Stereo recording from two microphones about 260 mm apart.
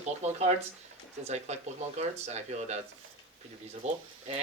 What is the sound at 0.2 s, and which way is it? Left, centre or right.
Speech, right.